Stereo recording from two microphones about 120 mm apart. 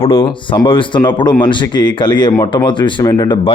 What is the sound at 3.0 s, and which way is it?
Speech, 30° left (ahead or behind).